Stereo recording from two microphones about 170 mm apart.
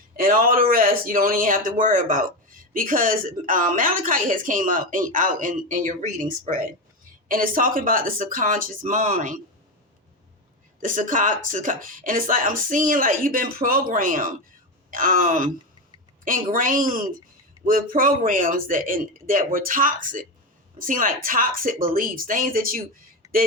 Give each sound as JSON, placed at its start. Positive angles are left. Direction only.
{"t": 0.2, "sound": "speech", "side_deg": -55}
{"t": 10.8, "sound": "speech", "side_deg": -50}